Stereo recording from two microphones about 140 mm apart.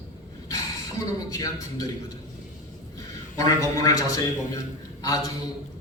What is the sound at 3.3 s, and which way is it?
Speech, 25° left (ahead or behind).